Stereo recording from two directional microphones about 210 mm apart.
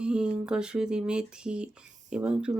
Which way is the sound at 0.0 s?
5° right (ahead or behind).